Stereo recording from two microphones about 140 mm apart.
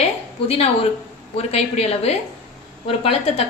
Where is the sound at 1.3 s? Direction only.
45° left (ahead or behind).